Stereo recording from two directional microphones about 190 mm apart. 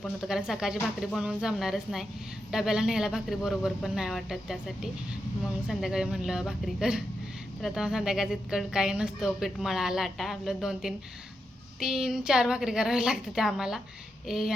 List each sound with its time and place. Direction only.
0.0 s a woman's voice: 5° right (ahead or behind)